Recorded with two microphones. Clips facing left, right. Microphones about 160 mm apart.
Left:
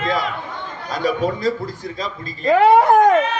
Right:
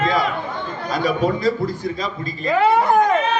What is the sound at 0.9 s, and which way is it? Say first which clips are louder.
Speech: right 1 dB; 40° left (ahead or behind).